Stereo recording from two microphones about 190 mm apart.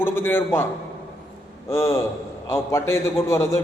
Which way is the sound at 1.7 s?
15° left (ahead or behind).